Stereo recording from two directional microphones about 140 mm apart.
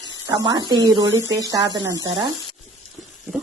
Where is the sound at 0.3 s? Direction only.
30° right (ahead or behind).